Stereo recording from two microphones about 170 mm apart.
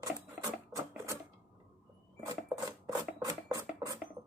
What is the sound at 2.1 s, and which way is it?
Filing, 25° right (ahead or behind).